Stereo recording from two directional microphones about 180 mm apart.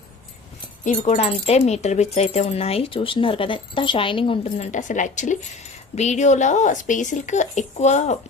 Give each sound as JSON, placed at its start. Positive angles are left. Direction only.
{"t": 0.9, "sound": "speech", "side_deg": 40}
{"t": 4.4, "sound": "a woman's voice", "side_deg": 40}